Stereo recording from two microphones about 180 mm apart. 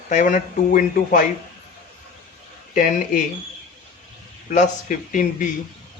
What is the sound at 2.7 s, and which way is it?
Speech, 45° left (ahead or behind).